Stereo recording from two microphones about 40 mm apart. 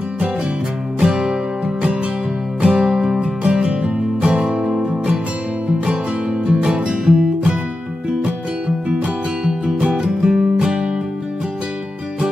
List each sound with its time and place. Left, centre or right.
0.9 s music: centre
2.6 s music: centre
3.2 s music: right
6.4 s music: right
10.0 s music: centre